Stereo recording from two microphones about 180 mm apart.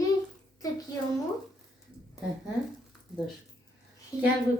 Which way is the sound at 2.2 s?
20° left (ahead or behind).